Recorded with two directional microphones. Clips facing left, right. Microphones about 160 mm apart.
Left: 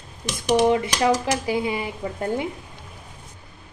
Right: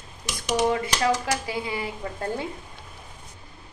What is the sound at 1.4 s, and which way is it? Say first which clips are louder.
A woman's voice: left 5 dB; 20° left (ahead or behind).